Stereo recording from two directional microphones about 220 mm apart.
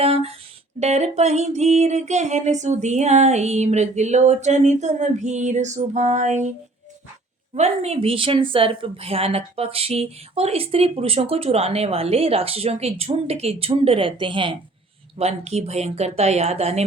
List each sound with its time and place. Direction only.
0.0 s speech: 25° right (ahead or behind)
0.8 s a sound: 30° right (ahead or behind)
7.5 s a woman's voice: 30° right (ahead or behind)